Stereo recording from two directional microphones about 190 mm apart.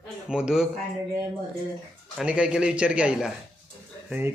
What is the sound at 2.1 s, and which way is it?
Speech, 5° right (ahead or behind).